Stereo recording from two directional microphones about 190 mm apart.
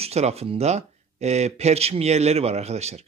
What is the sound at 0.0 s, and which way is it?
Speech, 35° right (ahead or behind).